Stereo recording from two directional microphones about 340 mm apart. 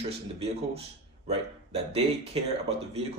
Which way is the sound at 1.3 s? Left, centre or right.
Centre.